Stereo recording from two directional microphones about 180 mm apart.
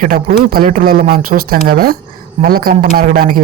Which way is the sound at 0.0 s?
50° right (ahead or behind).